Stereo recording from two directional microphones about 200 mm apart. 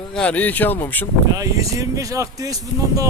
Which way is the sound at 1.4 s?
15° right (ahead or behind).